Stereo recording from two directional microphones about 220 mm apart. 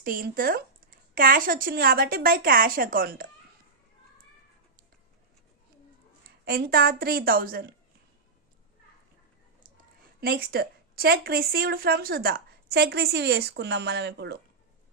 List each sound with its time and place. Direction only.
0.0 s a woman's voice: 40° right (ahead or behind)
6.4 s speech: 45° right (ahead or behind)
10.2 s speech: 45° right (ahead or behind)